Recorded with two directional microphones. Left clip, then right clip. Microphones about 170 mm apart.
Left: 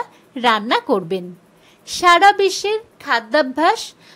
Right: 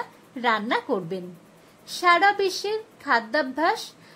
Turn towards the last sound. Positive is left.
turn(degrees=20)  # may be behind; listen again after turning